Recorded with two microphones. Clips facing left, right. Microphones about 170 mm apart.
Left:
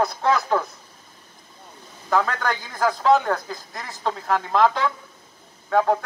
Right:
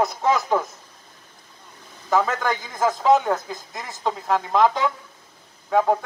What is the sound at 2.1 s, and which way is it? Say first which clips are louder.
Speech: right 1 dB; 5° right (ahead or behind).